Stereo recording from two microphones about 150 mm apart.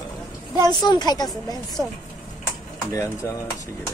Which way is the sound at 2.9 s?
20° left (ahead or behind).